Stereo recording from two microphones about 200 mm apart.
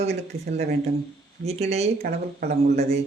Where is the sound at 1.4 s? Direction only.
30° right (ahead or behind).